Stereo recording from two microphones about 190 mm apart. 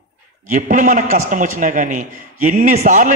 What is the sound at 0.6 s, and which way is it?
A man's voice, 40° right (ahead or behind).